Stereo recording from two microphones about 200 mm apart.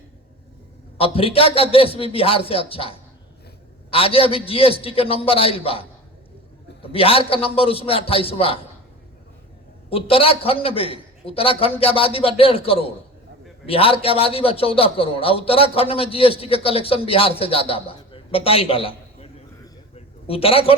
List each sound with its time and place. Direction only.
0.9 s a man's voice: 30° left (ahead or behind)
3.9 s a man's voice: 30° left (ahead or behind)
6.9 s a man's voice: 30° left (ahead or behind)
9.9 s a man's voice: 30° left (ahead or behind)
17.8 s a sound: 30° left (ahead or behind)
20.2 s a man's voice: 30° left (ahead or behind)